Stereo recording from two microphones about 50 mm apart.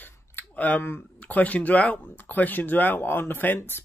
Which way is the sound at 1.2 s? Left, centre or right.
Left.